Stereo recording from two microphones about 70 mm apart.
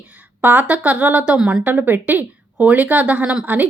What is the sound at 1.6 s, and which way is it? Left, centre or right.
A woman's voice, right.